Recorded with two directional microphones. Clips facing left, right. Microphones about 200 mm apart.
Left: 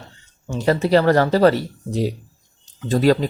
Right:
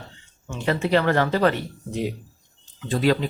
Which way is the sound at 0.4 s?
35° left (ahead or behind).